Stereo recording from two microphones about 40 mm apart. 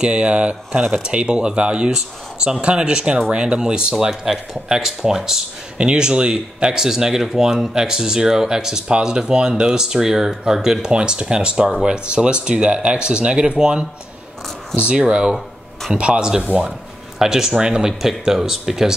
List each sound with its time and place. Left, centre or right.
0.0 s speech: right
17.2 s speech: centre